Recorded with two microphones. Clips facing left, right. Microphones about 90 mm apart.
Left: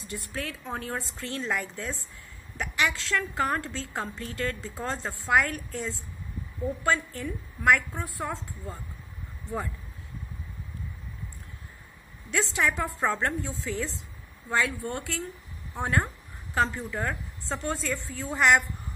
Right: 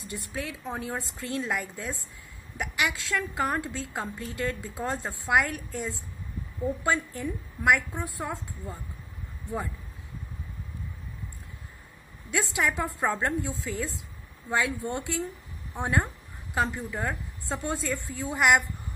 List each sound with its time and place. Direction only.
0.0 s a woman's voice: 20° right (ahead or behind)
12.5 s a woman's voice: 15° right (ahead or behind)